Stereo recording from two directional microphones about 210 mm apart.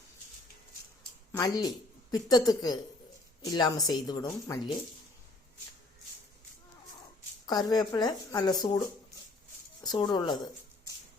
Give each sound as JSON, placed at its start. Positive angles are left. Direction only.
{"t": 1.3, "sound": "a woman's voice", "side_deg": 15}
{"t": 7.4, "sound": "speech", "side_deg": 20}